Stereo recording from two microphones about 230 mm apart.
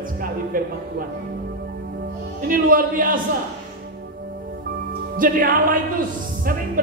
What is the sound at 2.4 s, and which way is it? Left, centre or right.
Speech, right.